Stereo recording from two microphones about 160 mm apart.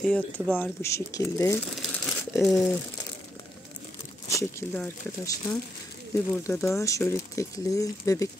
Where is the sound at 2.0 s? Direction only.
Centre (ahead or behind).